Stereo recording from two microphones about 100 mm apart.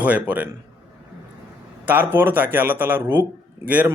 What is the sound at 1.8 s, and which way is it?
Speech, 20° right (ahead or behind).